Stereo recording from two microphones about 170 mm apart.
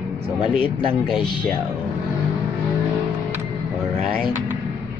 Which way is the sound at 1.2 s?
25° left (ahead or behind).